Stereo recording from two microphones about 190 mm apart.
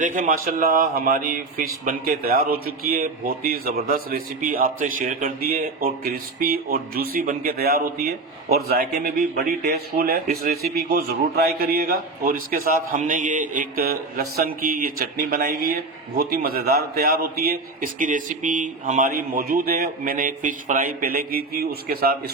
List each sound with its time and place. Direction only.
0.0 s speech: 45° right (ahead or behind)